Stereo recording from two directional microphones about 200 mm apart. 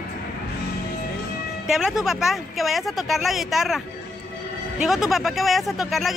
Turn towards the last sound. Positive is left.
turn(degrees=0)  # may be behind; listen again after turning